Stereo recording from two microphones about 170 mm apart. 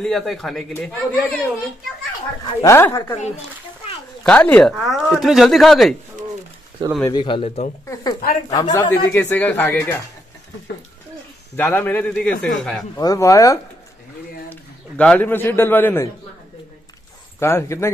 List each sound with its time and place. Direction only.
0.0 s speech: centre (ahead or behind)
2.6 s speech: 15° left (ahead or behind)
4.2 s speech: 5° left (ahead or behind)
6.8 s speech: 25° right (ahead or behind)
7.2 s speech: 30° left (ahead or behind)
7.9 s speech: 20° left (ahead or behind)
11.5 s speech: 10° left (ahead or behind)
12.9 s speech: 20° left (ahead or behind)
14.5 s a man's voice: 10° left (ahead or behind)
17.4 s speech: 15° left (ahead or behind)